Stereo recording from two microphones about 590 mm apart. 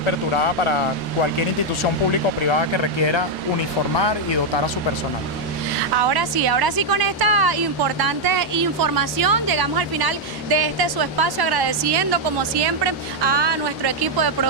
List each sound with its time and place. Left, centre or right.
2.4 s speech: left
5.9 s a woman's voice: right